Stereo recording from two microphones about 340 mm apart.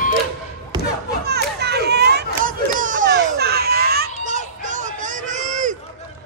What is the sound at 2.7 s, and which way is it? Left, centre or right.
Children playing, right.